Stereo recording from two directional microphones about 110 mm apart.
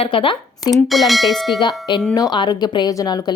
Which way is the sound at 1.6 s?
45° left (ahead or behind).